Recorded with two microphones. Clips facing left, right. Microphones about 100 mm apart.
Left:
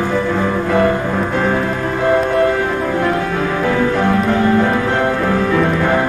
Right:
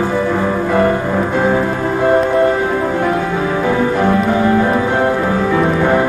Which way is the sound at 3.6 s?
15° right (ahead or behind).